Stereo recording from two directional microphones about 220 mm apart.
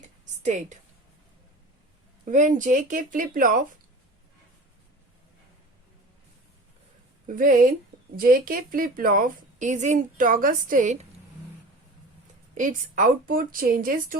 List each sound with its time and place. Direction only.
0.4 s a woman's voice: 35° right (ahead or behind)
2.2 s a woman's voice: 35° right (ahead or behind)
7.3 s a woman's voice: 40° right (ahead or behind)
12.5 s a woman's voice: 35° right (ahead or behind)